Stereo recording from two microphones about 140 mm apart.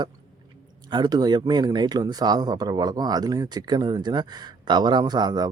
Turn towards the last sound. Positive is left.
turn(degrees=-30)  # may be behind; listen again after turning